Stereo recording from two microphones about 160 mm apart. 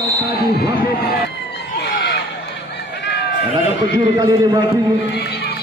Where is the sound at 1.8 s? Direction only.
90° left.